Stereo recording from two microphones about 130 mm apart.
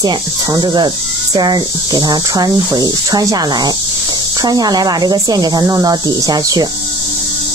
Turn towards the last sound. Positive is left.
turn(degrees=-30)  # may be behind; listen again after turning